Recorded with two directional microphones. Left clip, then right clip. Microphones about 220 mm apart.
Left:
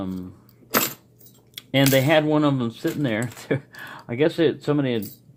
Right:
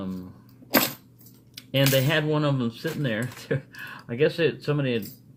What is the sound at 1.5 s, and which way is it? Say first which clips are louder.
Speech: left 3 dB; 40° left (ahead or behind).